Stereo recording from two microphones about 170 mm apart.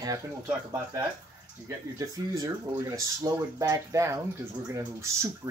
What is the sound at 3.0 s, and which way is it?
Speech, 20° right (ahead or behind).